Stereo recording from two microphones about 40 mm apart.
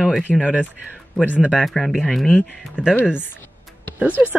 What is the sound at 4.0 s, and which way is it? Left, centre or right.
Speech, right.